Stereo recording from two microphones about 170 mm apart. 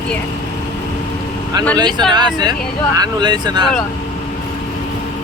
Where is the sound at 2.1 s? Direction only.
25° right (ahead or behind).